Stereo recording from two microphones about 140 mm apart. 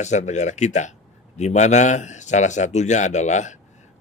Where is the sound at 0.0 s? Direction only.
55° left (ahead or behind).